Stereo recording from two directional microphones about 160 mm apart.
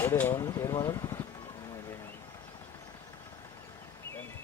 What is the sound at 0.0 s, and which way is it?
Speech, 15° left (ahead or behind).